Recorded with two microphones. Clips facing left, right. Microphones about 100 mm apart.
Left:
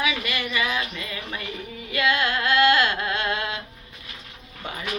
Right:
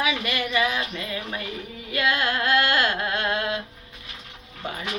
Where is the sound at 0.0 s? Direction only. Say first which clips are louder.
Right 1 dB; 45° right (ahead or behind).